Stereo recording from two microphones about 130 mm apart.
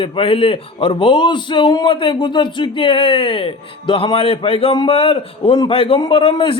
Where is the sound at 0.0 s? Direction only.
45° left (ahead or behind).